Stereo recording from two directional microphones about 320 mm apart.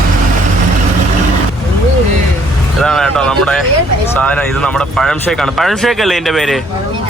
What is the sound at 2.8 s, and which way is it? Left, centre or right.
Speech, centre.